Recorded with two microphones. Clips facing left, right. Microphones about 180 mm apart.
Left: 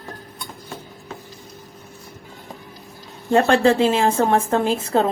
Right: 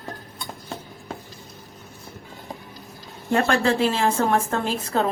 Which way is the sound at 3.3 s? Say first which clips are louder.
Left 5 dB; 30° left (ahead or behind).